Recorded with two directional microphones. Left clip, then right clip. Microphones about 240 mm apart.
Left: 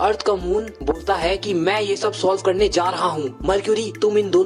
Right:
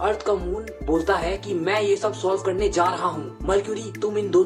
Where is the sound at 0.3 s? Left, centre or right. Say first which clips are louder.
Left 3 dB; left.